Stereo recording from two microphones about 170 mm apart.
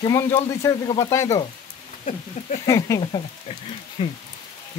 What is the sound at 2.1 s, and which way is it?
Speech, 45° left (ahead or behind).